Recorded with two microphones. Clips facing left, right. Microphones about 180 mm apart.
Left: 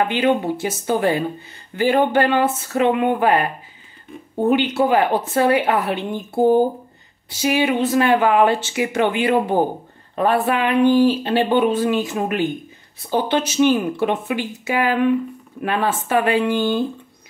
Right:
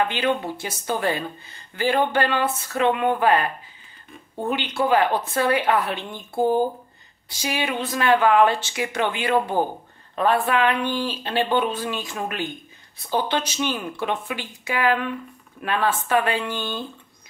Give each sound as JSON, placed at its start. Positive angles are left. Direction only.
{"t": 0.1, "sound": "speech", "side_deg": 15}
{"t": 12.1, "sound": "speech", "side_deg": 20}